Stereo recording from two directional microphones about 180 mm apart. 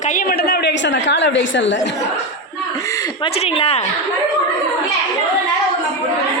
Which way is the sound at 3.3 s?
30° left (ahead or behind).